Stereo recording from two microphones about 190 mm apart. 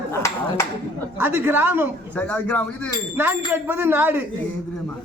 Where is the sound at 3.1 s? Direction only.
10° right (ahead or behind).